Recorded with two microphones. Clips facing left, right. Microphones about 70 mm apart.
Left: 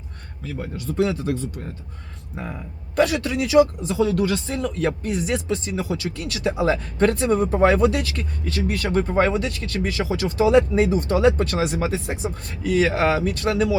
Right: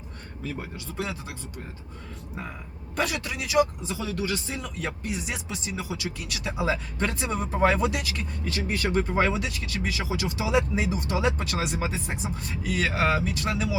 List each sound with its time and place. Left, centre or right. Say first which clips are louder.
0.6 s speech: left 15 dB; centre
2.3 s speech: left 6 dB; centre